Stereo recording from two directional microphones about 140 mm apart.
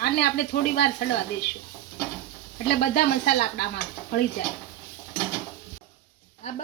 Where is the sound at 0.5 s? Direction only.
90° left.